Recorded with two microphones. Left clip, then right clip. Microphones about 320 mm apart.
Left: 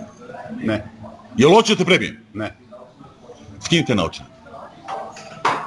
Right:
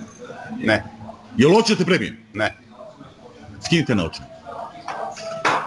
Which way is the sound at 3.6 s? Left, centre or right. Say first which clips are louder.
Left 2 dB; centre.